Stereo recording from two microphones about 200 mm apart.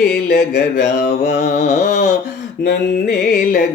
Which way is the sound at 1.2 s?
35° left (ahead or behind).